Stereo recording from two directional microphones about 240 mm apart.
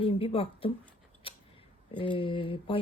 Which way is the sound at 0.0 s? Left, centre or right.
Left.